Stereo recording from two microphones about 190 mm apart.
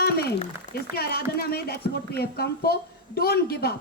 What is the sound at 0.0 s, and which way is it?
A man's voice, 55° left (ahead or behind).